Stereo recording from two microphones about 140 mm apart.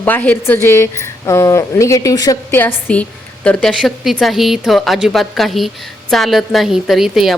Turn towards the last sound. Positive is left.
turn(degrees=0)  # may be behind; listen again after turning